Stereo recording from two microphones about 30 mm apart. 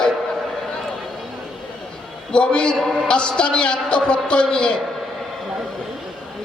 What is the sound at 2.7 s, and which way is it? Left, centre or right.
Speech, centre.